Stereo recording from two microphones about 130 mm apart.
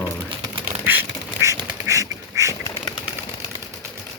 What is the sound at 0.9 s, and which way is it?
Duck, 20° right (ahead or behind).